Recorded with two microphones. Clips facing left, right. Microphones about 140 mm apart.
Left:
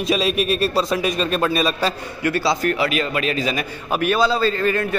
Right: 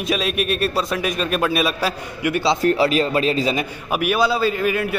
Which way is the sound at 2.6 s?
30° right (ahead or behind).